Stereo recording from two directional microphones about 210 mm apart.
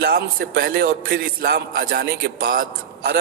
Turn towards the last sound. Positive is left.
turn(degrees=-45)  # may be behind; listen again after turning